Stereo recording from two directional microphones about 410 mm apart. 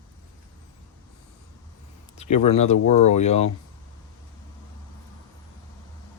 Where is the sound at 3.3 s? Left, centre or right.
Centre.